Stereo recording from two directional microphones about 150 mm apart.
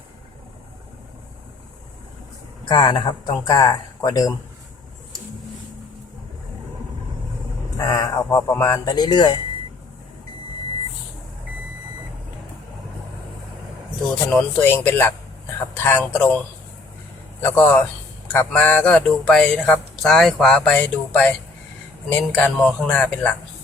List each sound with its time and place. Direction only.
2.6 s speech: 35° left (ahead or behind)
7.8 s speech: 25° left (ahead or behind)
14.3 s speech: 10° left (ahead or behind)
17.4 s speech: 10° left (ahead or behind)